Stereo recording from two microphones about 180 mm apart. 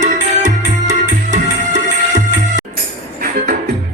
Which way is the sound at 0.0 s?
45° right (ahead or behind).